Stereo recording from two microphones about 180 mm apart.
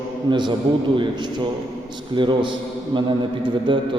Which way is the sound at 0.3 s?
25° right (ahead or behind).